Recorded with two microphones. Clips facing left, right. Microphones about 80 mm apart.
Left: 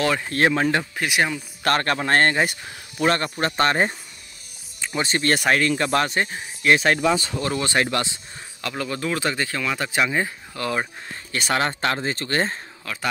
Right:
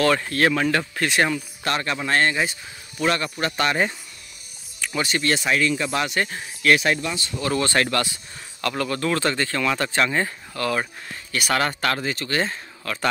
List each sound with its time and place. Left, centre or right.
0.0 s speech: centre
0.3 s speech: left; by 1.4 s centre
1.6 s speech: left
3.0 s speech: left
4.8 s music: left
5.1 s speech: left
6.2 s speech: centre
6.8 s speech: left
7.5 s speech: centre; by 12.5 s left
12.9 s speech: centre